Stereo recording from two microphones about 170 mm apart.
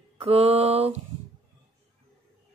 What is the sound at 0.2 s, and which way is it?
Speech, 35° right (ahead or behind).